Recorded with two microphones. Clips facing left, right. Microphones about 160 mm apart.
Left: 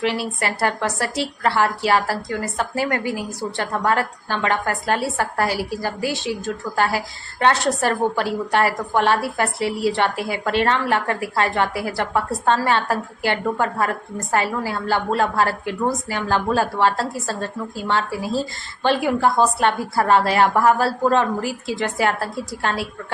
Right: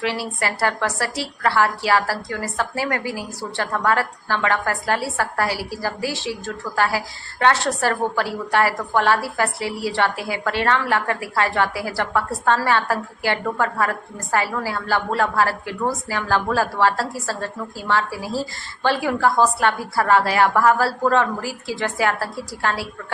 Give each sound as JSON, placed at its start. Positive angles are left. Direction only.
{"t": 0.0, "sound": "a woman's voice", "side_deg": 20}